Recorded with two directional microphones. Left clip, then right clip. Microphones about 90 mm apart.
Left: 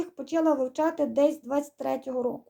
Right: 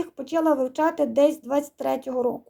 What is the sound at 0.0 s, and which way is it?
Speech, 30° right (ahead or behind).